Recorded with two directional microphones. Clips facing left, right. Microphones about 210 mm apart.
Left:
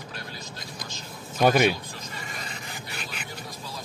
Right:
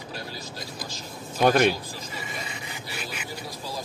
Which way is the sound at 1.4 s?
5° left (ahead or behind).